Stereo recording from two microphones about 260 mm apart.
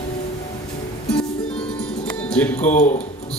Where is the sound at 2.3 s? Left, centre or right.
Centre.